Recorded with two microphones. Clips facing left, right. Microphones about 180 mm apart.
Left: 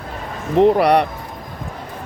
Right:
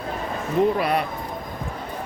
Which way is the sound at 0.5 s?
70° left (ahead or behind).